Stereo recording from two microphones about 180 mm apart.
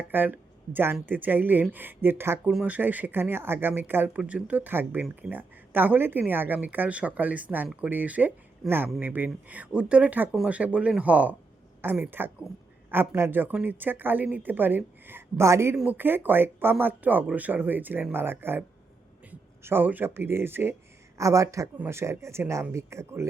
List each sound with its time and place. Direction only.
0.0 s speech: 10° right (ahead or behind)